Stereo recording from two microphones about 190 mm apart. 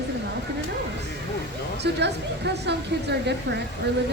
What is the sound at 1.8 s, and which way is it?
A woman's voice, 65° right (ahead or behind).